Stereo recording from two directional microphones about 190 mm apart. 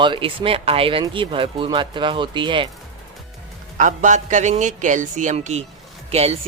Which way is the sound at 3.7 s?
40° right (ahead or behind).